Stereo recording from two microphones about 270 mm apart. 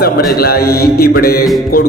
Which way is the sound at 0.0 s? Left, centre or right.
Left.